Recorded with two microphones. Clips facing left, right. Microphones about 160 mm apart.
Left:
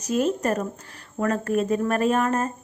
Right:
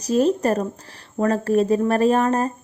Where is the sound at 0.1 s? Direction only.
35° right (ahead or behind).